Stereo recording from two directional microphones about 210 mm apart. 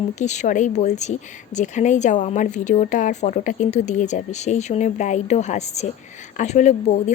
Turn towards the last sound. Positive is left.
turn(degrees=35)  # may be behind; listen again after turning